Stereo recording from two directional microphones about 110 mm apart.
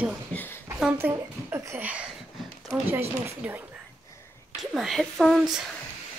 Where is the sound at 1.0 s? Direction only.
20° right (ahead or behind).